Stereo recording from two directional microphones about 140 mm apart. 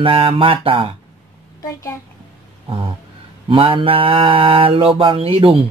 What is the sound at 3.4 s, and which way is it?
Mantra, 40° right (ahead or behind).